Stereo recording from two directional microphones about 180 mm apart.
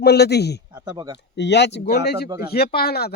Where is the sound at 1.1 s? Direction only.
70° left (ahead or behind).